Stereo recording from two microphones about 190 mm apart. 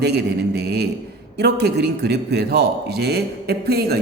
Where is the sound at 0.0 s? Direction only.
60° right (ahead or behind).